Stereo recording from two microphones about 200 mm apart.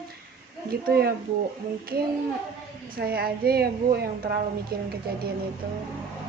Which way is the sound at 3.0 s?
50° right (ahead or behind).